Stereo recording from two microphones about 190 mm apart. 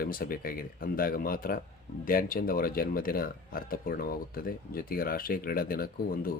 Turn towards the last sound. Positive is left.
turn(degrees=50)  # may be behind; listen again after turning